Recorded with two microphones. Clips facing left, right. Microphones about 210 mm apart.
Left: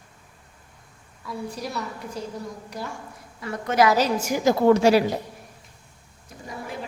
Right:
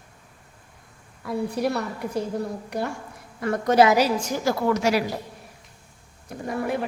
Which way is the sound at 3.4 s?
50° right (ahead or behind).